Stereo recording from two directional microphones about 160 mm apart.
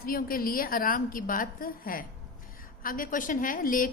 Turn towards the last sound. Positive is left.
turn(degrees=60)  # may be behind; listen again after turning